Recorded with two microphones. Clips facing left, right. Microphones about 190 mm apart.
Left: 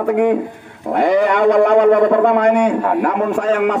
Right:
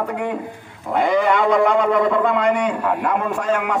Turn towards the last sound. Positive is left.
turn(degrees=60)  # may be behind; listen again after turning